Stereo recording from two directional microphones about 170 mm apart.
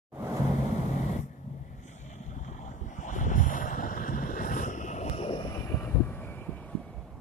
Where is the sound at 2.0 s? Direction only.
45° left (ahead or behind).